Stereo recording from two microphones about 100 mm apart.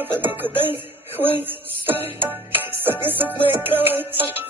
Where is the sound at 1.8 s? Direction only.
20° right (ahead or behind).